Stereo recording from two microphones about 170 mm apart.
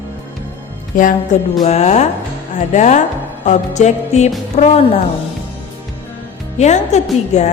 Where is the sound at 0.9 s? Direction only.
50° left (ahead or behind).